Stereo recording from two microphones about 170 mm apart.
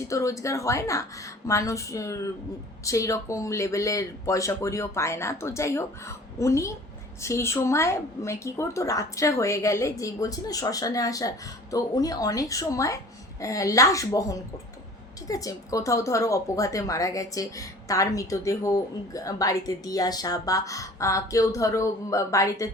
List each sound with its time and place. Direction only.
0.1 s speech: 20° left (ahead or behind)